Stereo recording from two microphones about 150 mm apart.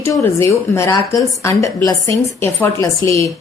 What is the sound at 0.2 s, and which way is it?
A woman's voice, 20° left (ahead or behind).